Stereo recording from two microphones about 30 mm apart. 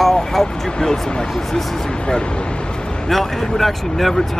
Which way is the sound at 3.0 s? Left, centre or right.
Centre.